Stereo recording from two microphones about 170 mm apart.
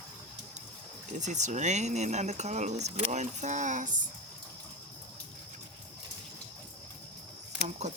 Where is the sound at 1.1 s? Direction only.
45° right (ahead or behind).